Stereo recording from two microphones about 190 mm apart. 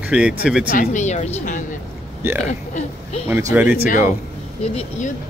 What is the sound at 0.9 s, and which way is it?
A woman's voice, 40° left (ahead or behind).